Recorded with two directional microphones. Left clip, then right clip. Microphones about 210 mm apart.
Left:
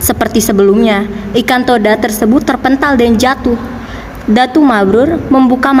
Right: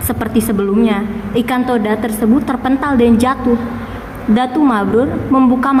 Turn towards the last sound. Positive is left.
turn(degrees=40)  # may be behind; listen again after turning